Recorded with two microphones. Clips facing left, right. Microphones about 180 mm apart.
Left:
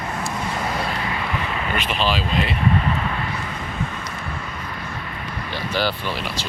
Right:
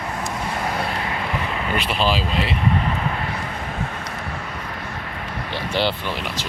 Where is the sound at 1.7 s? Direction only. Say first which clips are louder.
Right 2 dB; 35° right (ahead or behind).